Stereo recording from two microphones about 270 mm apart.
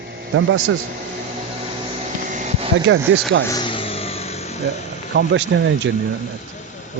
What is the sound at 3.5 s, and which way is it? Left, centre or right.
Vehicle, centre.